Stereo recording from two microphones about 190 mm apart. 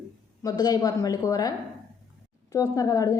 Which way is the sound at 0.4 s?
20° left (ahead or behind).